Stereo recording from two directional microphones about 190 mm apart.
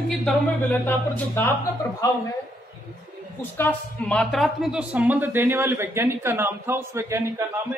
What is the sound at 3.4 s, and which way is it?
A woman's voice, 10° left (ahead or behind).